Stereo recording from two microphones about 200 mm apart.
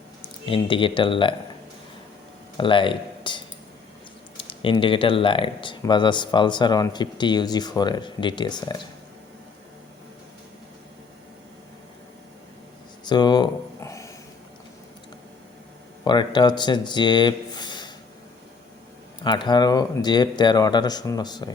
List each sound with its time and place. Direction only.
0.2 s speech: 25° left (ahead or behind)
2.6 s speech: 25° left (ahead or behind)
13.1 s a sound: 20° left (ahead or behind)
16.0 s speech: 20° left (ahead or behind)
19.2 s speech: 20° left (ahead or behind)